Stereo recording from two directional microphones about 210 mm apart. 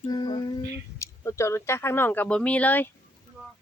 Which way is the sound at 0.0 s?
20° left (ahead or behind).